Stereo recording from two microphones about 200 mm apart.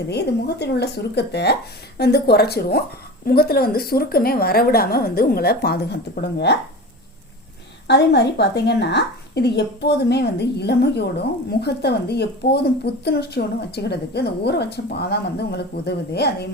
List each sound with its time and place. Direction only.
0.1 s a woman's voice: 55° left (ahead or behind)
7.9 s a woman's voice: 55° left (ahead or behind)